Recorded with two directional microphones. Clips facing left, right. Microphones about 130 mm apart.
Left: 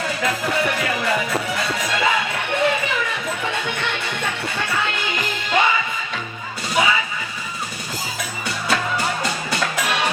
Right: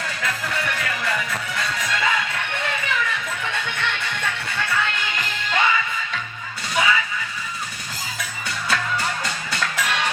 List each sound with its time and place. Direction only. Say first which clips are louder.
0.0 s music: left 5 dB; 20° left (ahead or behind)
8.7 s music: left 3 dB; 20° left (ahead or behind)